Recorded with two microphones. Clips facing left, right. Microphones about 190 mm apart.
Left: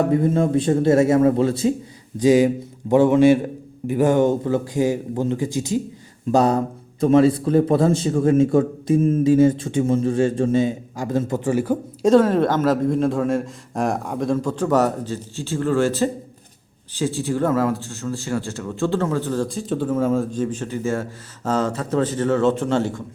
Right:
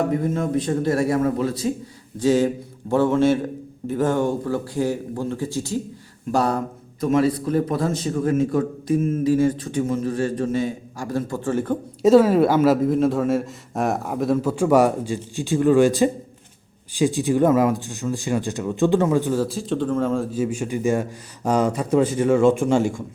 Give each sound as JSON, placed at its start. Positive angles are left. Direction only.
{"t": 0.2, "sound": "a man's voice", "side_deg": 30}
{"t": 2.1, "sound": "a man's voice", "side_deg": 15}
{"t": 11.5, "sound": "speech", "side_deg": 10}
{"t": 12.0, "sound": "a man's voice", "side_deg": -5}
{"t": 20.3, "sound": "a man's voice", "side_deg": -10}